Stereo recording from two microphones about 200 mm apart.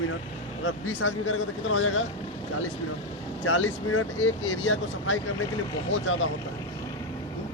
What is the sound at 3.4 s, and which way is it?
Speech, 90° left.